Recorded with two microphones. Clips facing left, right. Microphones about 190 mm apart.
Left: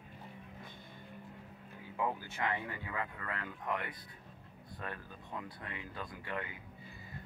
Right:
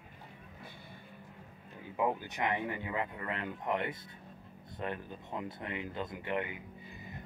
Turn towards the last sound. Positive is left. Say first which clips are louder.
# right 6 dB
turn(degrees=-20)  # may be behind; listen again after turning